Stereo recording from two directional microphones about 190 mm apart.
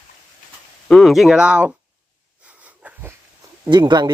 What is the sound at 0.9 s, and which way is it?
Speech, centre (ahead or behind).